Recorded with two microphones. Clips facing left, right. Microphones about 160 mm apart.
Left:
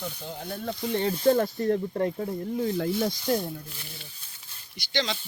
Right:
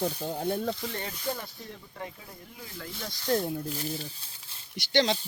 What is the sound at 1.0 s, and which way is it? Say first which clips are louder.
Speech: left 13 dB; 30° left (ahead or behind).